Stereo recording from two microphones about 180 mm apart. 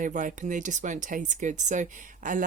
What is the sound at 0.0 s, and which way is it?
Speech, 45° right (ahead or behind).